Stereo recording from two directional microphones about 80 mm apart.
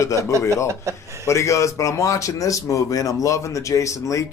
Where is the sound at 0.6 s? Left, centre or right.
Right.